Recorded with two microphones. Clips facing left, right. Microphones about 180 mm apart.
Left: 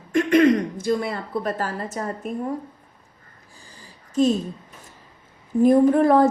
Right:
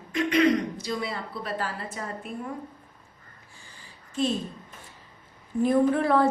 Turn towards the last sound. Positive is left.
turn(degrees=45)  # may be behind; listen again after turning